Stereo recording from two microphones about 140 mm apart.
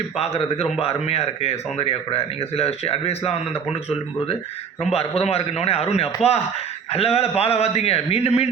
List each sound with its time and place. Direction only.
0.2 s speech: 50° left (ahead or behind)